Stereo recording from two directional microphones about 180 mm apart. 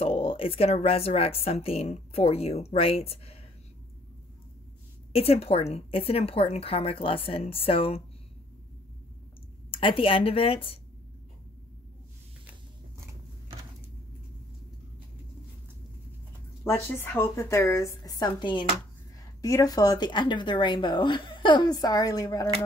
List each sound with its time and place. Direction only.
0.0 s speech: 30° left (ahead or behind)
5.1 s speech: 35° left (ahead or behind)
9.7 s a woman's voice: 30° left (ahead or behind)
16.6 s a woman's voice: 15° left (ahead or behind)